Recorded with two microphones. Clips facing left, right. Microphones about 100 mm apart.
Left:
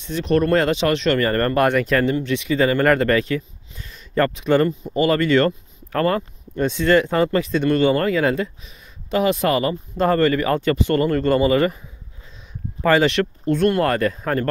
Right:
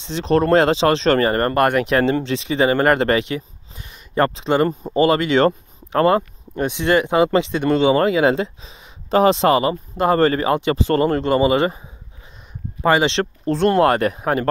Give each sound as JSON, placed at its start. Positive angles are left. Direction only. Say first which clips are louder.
{"t": 0.0, "sound": "speech", "louder": "right 1 dB", "side_deg": -25}
{"t": 1.2, "sound": "speech", "louder": "right 2 dB", "side_deg": -20}
{"t": 1.5, "sound": "speech", "louder": "right 1 dB", "side_deg": -5}
{"t": 2.2, "sound": "speech", "louder": "right 1 dB", "side_deg": -30}
{"t": 3.0, "sound": "a sound", "louder": "even", "side_deg": -25}
{"t": 4.4, "sound": "speech", "louder": "left 3 dB", "side_deg": -20}
{"t": 4.6, "sound": "speech", "louder": "right 3 dB", "side_deg": -35}
{"t": 5.1, "sound": "speech", "louder": "right 1 dB", "side_deg": -20}
{"t": 6.5, "sound": "speech", "louder": "left 1 dB", "side_deg": -15}
{"t": 10.5, "sound": "speech", "louder": "right 1 dB", "side_deg": -20}
{"t": 10.8, "sound": "speech", "louder": "right 1 dB", "side_deg": -35}
{"t": 11.2, "sound": "speech", "louder": "even", "side_deg": -20}
{"t": 12.8, "sound": "speech", "louder": "even", "side_deg": -20}